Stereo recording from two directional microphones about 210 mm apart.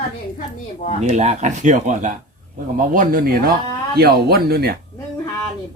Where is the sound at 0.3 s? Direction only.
35° left (ahead or behind).